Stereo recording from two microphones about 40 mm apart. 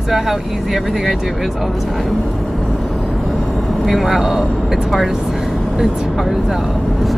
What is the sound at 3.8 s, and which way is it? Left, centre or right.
Speech, centre.